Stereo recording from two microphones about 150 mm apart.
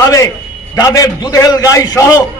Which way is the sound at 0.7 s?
25° left (ahead or behind).